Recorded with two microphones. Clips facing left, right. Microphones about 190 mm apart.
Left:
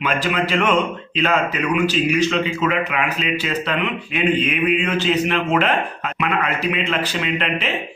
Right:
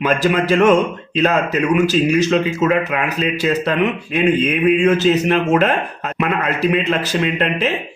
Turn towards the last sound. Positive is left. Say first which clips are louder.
# right 5 dB
turn(degrees=-40)  # may be behind; listen again after turning